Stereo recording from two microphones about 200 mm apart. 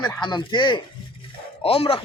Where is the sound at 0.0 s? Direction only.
20° left (ahead or behind).